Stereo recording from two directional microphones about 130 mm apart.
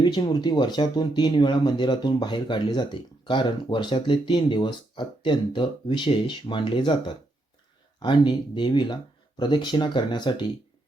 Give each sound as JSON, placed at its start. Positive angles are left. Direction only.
{"t": 0.0, "sound": "speech", "side_deg": 35}
{"t": 7.9, "sound": "speech", "side_deg": 35}